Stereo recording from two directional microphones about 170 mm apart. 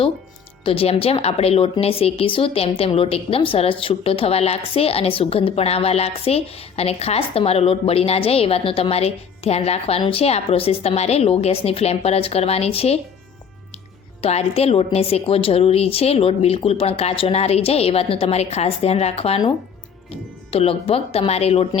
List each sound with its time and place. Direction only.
0.6 s speech: 35° left (ahead or behind)
14.2 s speech: 35° left (ahead or behind)
20.5 s speech: 35° left (ahead or behind)